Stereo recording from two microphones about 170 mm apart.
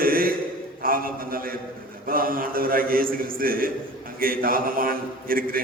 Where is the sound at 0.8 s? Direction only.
60° right (ahead or behind).